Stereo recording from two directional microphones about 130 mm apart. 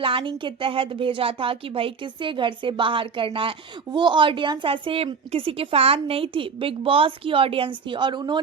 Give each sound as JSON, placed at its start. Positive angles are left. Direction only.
{"t": 0.0, "sound": "a woman's voice", "side_deg": -40}